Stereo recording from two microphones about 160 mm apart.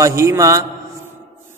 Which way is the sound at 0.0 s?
20° right (ahead or behind).